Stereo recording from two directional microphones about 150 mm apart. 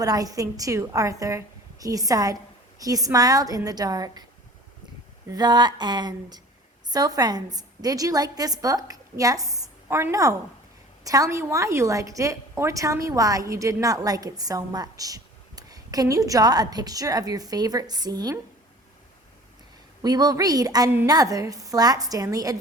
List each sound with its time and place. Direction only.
0.0 s a woman's voice: 25° right (ahead or behind)
5.3 s a woman's voice: 30° right (ahead or behind)
20.0 s a woman's voice: 25° right (ahead or behind)